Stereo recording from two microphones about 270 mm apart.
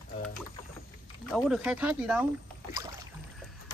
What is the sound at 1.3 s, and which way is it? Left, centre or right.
Speech, centre.